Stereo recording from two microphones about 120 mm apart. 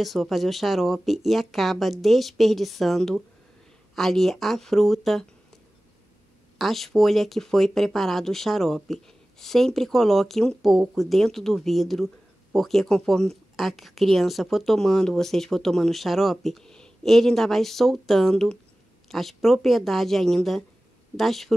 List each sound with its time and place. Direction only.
0.0 s speech: centre (ahead or behind)
6.6 s speech: centre (ahead or behind)